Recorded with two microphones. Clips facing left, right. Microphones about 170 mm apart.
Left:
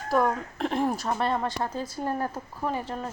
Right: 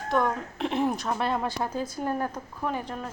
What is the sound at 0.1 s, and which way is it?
A woman's voice, centre (ahead or behind).